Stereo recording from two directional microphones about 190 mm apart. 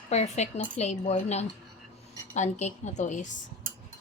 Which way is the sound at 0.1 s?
35° left (ahead or behind).